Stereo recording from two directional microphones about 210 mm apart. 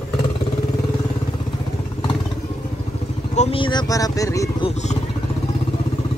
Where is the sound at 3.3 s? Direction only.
30° left (ahead or behind).